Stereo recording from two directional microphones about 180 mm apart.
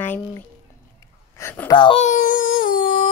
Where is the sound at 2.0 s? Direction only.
50° left (ahead or behind).